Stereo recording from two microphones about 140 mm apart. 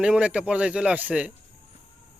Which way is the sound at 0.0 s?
5° right (ahead or behind).